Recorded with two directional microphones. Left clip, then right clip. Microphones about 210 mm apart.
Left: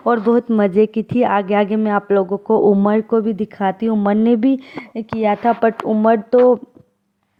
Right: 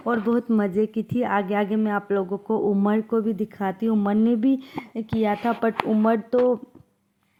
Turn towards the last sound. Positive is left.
turn(degrees=25)  # may be behind; listen again after turning